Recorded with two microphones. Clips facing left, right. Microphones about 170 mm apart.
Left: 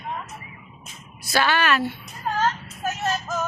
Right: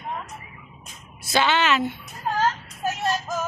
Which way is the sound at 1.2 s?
20° right (ahead or behind).